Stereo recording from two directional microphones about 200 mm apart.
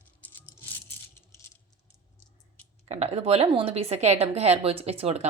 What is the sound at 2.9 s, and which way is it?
A woman's voice, 30° right (ahead or behind).